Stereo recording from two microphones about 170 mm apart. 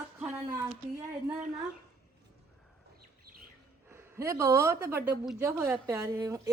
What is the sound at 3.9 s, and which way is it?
A woman's voice, 15° right (ahead or behind).